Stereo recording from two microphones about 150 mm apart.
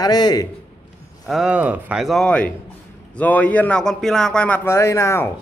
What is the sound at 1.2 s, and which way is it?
A man's voice, centre (ahead or behind).